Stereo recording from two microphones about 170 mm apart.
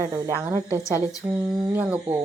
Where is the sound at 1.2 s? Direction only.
20° right (ahead or behind).